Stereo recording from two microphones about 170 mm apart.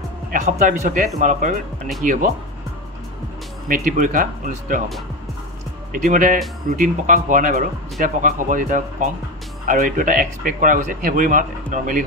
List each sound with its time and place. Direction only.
0.3 s speech: 45° right (ahead or behind)
3.6 s speech: 50° right (ahead or behind)
5.9 s speech: 50° right (ahead or behind)